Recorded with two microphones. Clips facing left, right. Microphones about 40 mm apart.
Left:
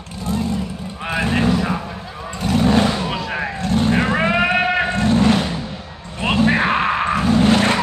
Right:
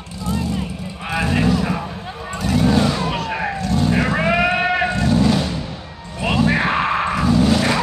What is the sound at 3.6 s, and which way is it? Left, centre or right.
Vehicle, left.